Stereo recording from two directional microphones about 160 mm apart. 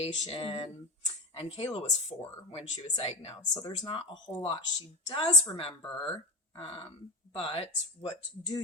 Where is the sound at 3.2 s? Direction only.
25° left (ahead or behind).